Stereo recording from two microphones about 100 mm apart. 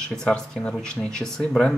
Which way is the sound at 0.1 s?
10° left (ahead or behind).